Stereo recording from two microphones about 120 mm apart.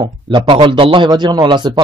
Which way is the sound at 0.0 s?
40° right (ahead or behind).